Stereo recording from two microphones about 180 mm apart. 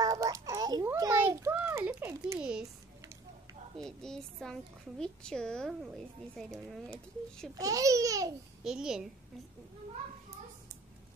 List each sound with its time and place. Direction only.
0.0 s a sound: 20° right (ahead or behind)
3.8 s a child's voice: 5° left (ahead or behind)
7.5 s speech: 20° right (ahead or behind)
8.6 s a child's voice: 5° right (ahead or behind)